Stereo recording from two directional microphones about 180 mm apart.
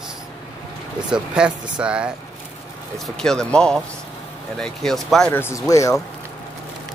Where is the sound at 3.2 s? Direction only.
5° left (ahead or behind).